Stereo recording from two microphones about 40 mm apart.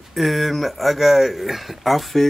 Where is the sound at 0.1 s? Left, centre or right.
Centre.